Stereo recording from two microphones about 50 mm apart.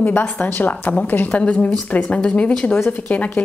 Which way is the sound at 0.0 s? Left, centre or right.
Left.